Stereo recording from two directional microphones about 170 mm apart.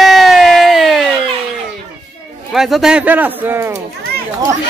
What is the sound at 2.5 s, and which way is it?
Speech, centre (ahead or behind).